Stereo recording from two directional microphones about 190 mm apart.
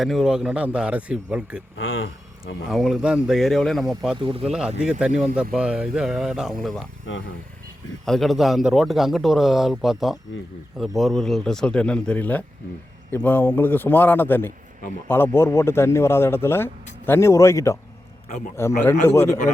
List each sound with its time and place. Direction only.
0.0 s speech: centre (ahead or behind)
2.6 s speech: centre (ahead or behind)
4.2 s speech: 30° right (ahead or behind)
4.8 s speech: 5° right (ahead or behind)
8.0 s speech: centre (ahead or behind)